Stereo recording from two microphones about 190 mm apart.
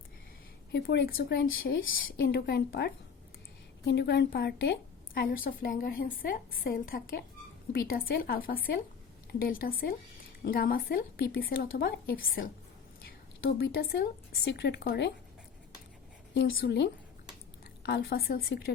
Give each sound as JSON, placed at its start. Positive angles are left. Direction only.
{"t": 0.7, "sound": "a woman's voice", "side_deg": 60}
{"t": 13.5, "sound": "a woman's voice", "side_deg": 55}
{"t": 16.3, "sound": "a woman's voice", "side_deg": 60}